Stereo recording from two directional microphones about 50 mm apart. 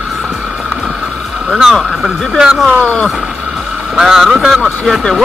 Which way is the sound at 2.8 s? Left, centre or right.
Left.